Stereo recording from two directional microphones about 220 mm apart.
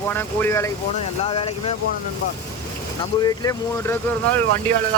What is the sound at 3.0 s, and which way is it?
Speech, 15° left (ahead or behind).